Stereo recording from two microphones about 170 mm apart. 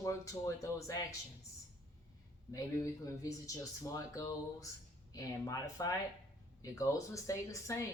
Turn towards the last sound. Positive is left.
turn(degrees=20)  # may be behind; listen again after turning